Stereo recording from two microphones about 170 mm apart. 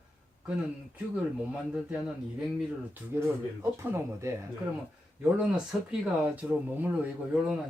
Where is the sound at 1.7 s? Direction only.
5° right (ahead or behind).